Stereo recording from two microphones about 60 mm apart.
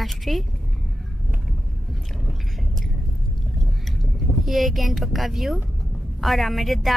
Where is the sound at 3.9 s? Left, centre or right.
Centre.